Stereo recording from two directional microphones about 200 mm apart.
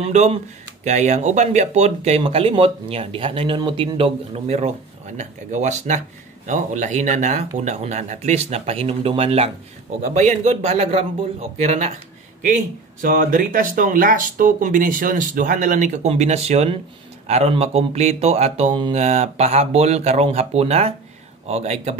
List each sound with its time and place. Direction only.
0.0 s speech: 30° right (ahead or behind)
13.0 s speech: 45° right (ahead or behind)